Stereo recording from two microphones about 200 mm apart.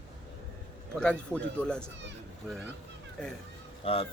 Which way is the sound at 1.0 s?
5° left (ahead or behind).